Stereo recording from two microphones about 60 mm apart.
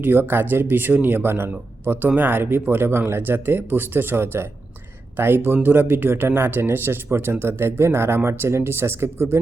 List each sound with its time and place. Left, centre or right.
0.0 s speech: right